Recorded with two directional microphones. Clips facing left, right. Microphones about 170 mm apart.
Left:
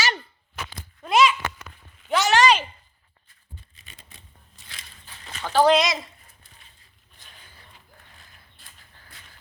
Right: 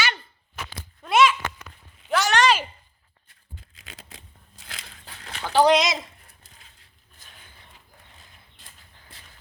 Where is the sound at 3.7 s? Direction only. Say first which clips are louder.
Right 6 dB; 90° right; by 5.3 s 75° right (ahead or behind).